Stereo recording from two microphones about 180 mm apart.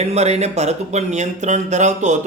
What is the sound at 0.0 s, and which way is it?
Speech, 35° right (ahead or behind).